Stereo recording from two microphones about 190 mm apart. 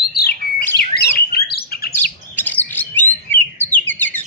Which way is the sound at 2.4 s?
10° left (ahead or behind).